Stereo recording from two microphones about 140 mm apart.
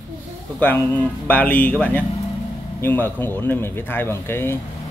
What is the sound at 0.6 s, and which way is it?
Speech, 10° left (ahead or behind).